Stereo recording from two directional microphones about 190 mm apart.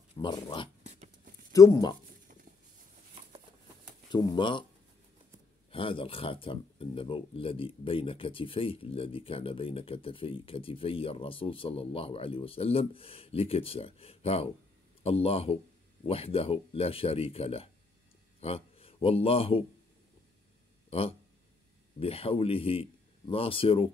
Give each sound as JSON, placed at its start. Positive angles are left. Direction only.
{"t": 0.1, "sound": "speech", "side_deg": 20}
{"t": 0.8, "sound": "a sound", "side_deg": -40}
{"t": 1.5, "sound": "speech", "side_deg": 20}
{"t": 4.1, "sound": "speech", "side_deg": 25}
{"t": 5.7, "sound": "speech", "side_deg": 30}
{"t": 22.0, "sound": "speech", "side_deg": 30}